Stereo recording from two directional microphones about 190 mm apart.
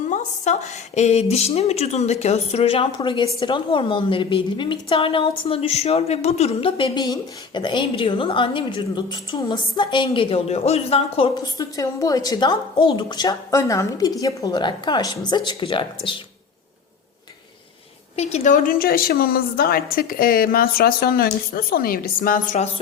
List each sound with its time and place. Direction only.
0.1 s a woman's voice: 40° left (ahead or behind)
18.2 s a woman's voice: 35° left (ahead or behind)